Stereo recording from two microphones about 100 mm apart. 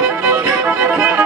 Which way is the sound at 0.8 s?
15° right (ahead or behind).